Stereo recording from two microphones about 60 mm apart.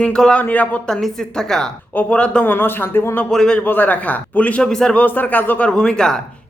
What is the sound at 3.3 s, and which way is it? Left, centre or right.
Speech, centre.